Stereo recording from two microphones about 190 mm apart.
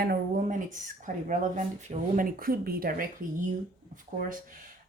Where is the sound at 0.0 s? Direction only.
50° right (ahead or behind).